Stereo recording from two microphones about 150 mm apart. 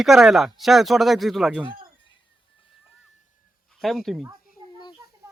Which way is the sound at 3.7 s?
Centre (ahead or behind).